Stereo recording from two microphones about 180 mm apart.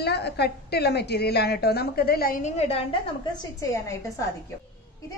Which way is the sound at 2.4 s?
35° left (ahead or behind).